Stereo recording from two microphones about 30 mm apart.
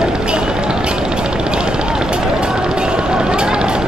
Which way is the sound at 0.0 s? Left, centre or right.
Right.